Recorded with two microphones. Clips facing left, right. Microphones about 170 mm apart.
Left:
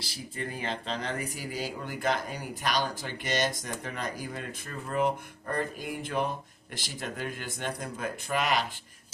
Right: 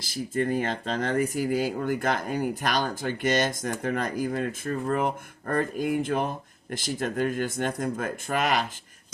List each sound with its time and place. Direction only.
0.3 s speech: 45° right (ahead or behind)